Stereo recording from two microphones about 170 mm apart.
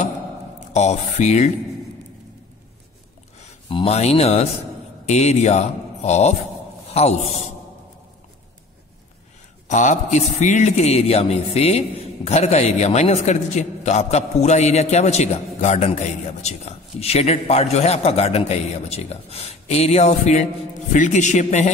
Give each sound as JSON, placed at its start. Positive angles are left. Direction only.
{"t": 0.7, "sound": "speech", "side_deg": 40}
{"t": 3.6, "sound": "a man's voice", "side_deg": 35}
{"t": 9.7, "sound": "a man's voice", "side_deg": 45}